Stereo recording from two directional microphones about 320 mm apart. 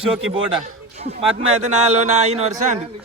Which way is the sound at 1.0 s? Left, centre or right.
Centre.